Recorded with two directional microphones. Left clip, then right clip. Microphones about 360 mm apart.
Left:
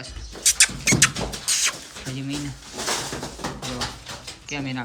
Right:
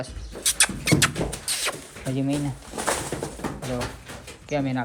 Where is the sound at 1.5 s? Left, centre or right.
Centre.